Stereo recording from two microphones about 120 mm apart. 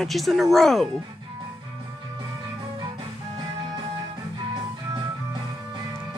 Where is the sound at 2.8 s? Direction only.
45° right (ahead or behind).